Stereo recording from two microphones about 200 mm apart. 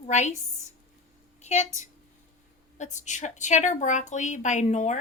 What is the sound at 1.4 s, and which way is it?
A woman's voice, 35° left (ahead or behind).